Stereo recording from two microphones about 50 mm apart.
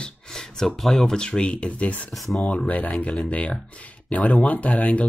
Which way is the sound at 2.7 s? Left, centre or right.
Left.